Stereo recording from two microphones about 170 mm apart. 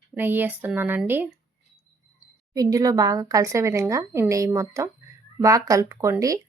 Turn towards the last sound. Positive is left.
turn(degrees=-20)  # may be behind; listen again after turning